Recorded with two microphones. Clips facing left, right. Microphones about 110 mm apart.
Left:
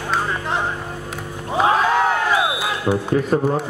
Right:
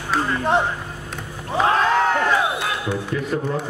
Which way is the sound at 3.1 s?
40° left (ahead or behind).